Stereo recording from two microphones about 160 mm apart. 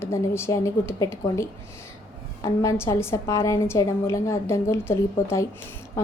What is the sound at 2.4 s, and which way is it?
A woman's voice, 20° left (ahead or behind).